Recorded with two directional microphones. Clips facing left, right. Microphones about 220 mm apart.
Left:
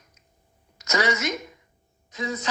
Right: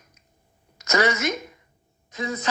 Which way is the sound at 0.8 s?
55° right (ahead or behind).